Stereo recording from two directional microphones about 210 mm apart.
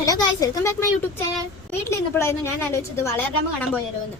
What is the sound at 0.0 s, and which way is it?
A woman's voice, 15° left (ahead or behind).